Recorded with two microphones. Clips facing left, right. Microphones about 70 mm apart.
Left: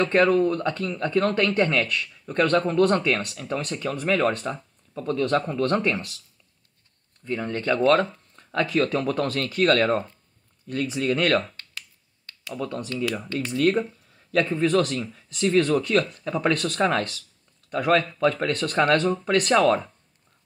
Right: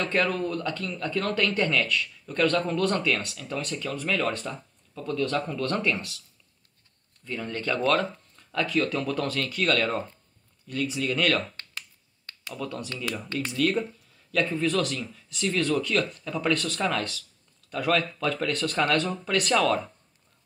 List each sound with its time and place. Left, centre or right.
0.0 s speech: left
7.2 s speech: left
12.5 s speech: left